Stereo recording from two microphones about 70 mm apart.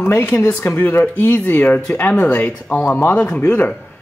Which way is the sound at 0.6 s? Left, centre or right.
Left.